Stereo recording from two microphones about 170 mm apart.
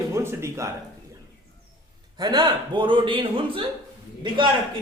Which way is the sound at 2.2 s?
25° right (ahead or behind).